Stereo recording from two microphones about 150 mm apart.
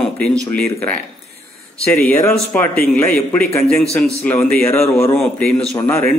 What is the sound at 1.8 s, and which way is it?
A man's voice, 10° left (ahead or behind).